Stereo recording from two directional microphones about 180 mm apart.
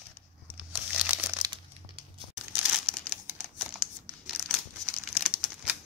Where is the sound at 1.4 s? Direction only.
30° right (ahead or behind).